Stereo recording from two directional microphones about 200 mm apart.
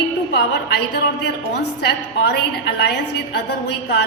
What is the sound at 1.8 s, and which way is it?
A woman's voice, 55° left (ahead or behind).